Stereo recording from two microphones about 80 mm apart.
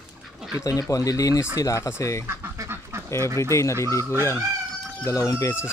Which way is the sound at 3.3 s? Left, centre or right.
Left.